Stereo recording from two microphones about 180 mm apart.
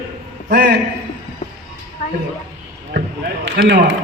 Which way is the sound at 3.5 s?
60° right (ahead or behind).